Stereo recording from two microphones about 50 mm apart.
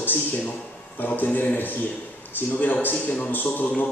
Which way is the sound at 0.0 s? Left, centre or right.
Left.